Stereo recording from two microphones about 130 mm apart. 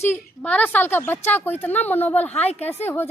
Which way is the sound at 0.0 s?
15° left (ahead or behind).